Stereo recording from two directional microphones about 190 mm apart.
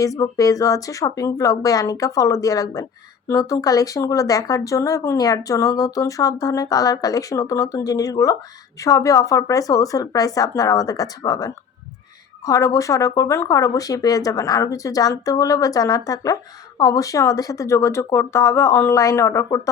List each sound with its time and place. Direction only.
0.0 s speech: 20° left (ahead or behind)